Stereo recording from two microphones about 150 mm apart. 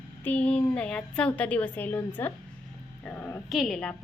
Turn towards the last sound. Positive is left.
turn(degrees=5)  # may be behind; listen again after turning